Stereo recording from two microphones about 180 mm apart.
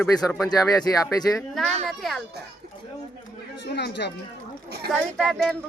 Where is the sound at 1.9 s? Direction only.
Centre (ahead or behind).